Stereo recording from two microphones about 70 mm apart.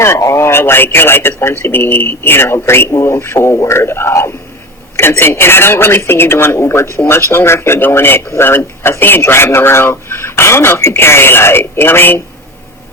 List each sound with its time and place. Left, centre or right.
0.0 s speech: left